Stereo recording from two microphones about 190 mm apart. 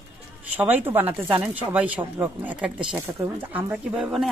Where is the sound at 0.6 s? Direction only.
10° right (ahead or behind).